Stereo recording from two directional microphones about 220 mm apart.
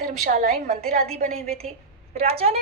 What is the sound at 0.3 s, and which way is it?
A woman's voice, 35° right (ahead or behind).